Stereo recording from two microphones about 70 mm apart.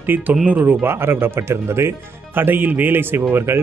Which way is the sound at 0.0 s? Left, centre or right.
Right.